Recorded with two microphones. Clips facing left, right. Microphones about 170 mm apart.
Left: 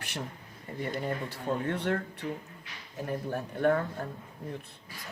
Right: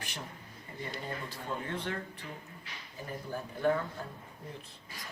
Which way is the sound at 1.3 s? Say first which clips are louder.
Left 6 dB; 65° left (ahead or behind).